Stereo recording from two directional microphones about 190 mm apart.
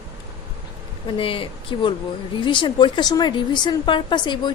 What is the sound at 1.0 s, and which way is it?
A woman's voice, 25° left (ahead or behind).